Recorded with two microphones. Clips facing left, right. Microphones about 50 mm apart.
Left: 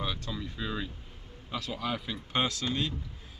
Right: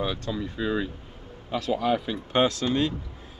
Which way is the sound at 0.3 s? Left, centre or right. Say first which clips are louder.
Right 8 dB; centre.